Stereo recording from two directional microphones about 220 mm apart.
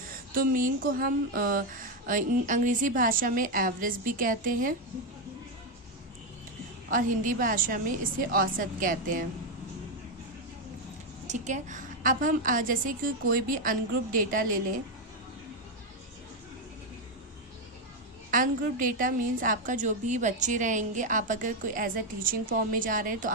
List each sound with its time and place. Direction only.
0.5 s a woman's voice: 40° right (ahead or behind)
6.9 s a woman's voice: 40° right (ahead or behind)
11.3 s a woman's voice: 35° right (ahead or behind)
18.3 s a woman's voice: 40° right (ahead or behind)